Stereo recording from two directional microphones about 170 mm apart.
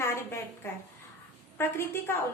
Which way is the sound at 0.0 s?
15° left (ahead or behind).